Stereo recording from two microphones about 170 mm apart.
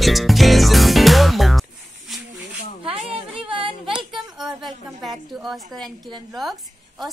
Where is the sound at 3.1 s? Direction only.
30° right (ahead or behind).